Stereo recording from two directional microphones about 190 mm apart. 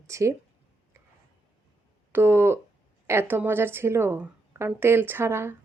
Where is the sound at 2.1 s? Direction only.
15° right (ahead or behind).